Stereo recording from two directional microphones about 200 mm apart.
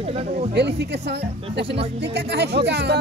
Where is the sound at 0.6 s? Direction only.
60° right (ahead or behind).